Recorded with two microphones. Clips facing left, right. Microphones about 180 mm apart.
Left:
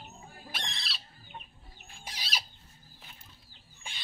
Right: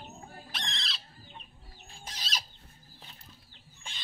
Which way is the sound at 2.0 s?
10° left (ahead or behind).